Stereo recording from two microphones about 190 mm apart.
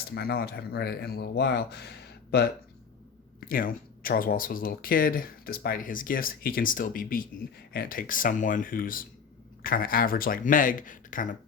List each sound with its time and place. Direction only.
0.1 s speech: 55° left (ahead or behind)
3.4 s speech: 50° left (ahead or behind)